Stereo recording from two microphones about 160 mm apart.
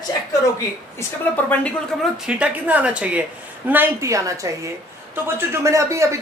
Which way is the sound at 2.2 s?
5° right (ahead or behind).